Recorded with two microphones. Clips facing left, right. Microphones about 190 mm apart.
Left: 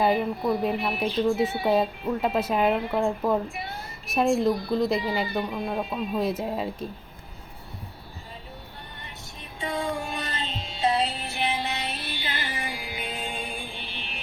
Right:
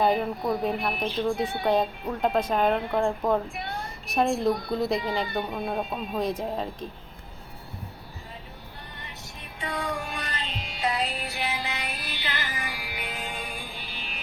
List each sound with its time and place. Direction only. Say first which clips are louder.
0.0 s speech: left 1 dB; centre (ahead or behind)
9.6 s music: left 2 dB; 25° left (ahead or behind)